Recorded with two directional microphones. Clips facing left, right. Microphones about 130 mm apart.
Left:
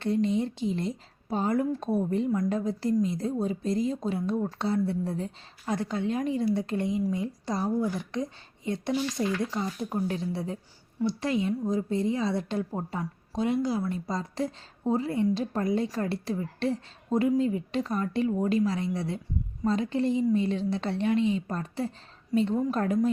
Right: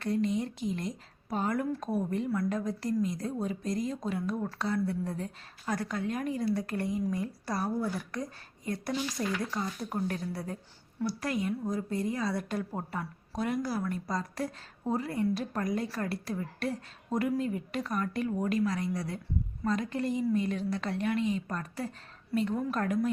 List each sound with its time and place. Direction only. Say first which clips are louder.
0.0 s a woman's voice: left 4 dB; 30° left (ahead or behind)